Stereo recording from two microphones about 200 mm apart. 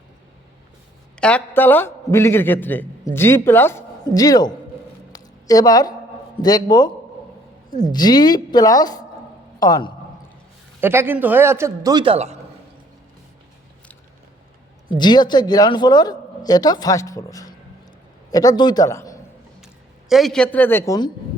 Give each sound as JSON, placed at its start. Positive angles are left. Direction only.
{"t": 1.2, "sound": "a man's voice", "side_deg": 5}
{"t": 5.1, "sound": "a sound", "side_deg": 20}
{"t": 6.4, "sound": "a man's voice", "side_deg": 20}
{"t": 10.8, "sound": "a man's voice", "side_deg": -10}
{"t": 14.9, "sound": "a man's voice", "side_deg": 20}
{"t": 19.6, "sound": "speech", "side_deg": 0}